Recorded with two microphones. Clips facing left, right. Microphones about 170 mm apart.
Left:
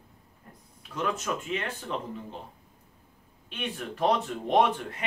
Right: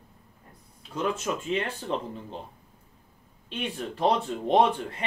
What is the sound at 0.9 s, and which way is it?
Speech, 30° right (ahead or behind).